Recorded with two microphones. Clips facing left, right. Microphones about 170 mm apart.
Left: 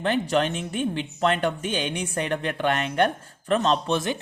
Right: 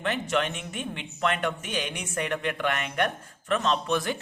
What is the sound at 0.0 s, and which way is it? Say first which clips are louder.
Speech: left 5 dB; 35° left (ahead or behind).